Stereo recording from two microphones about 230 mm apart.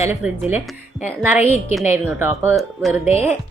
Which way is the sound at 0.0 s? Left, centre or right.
Centre.